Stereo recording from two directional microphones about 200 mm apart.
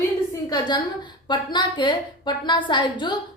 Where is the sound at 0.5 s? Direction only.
20° left (ahead or behind).